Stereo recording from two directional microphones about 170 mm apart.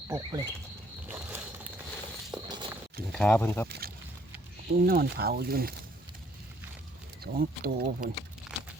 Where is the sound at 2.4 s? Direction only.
25° right (ahead or behind).